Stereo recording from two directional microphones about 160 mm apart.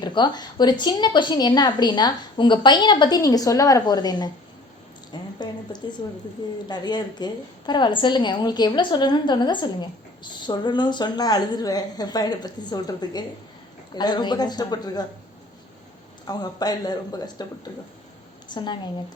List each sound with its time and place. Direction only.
0.0 s a woman's voice: 25° left (ahead or behind)
5.1 s a sound: 30° left (ahead or behind)
6.0 s a woman's voice: 30° left (ahead or behind)
16.2 s a woman's voice: 25° left (ahead or behind)
18.4 s a woman's voice: 30° left (ahead or behind)